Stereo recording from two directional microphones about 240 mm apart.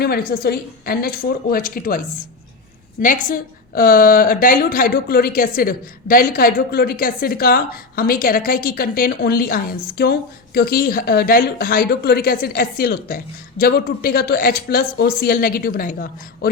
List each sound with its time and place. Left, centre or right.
0.0 s a woman's voice: left